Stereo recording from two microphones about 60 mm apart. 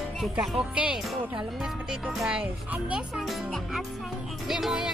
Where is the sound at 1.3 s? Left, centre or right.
Centre.